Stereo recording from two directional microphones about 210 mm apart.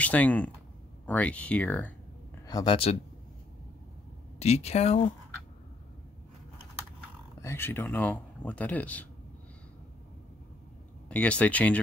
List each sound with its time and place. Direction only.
0.0 s speech: 5° left (ahead or behind)
2.4 s speech: 20° left (ahead or behind)
4.4 s speech: 30° left (ahead or behind)
7.4 s speech: 10° left (ahead or behind)
11.1 s speech: 5° left (ahead or behind)